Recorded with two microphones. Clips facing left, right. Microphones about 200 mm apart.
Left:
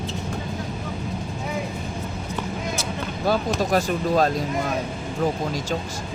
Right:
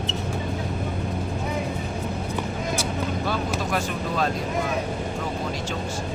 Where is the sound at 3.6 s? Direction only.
40° left (ahead or behind).